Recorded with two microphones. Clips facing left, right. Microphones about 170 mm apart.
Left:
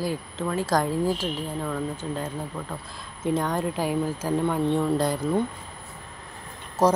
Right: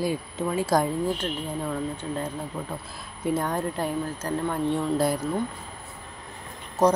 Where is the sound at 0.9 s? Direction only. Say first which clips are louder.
Left 2 dB; 5° left (ahead or behind).